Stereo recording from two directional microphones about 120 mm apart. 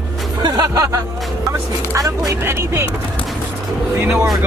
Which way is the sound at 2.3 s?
20° right (ahead or behind).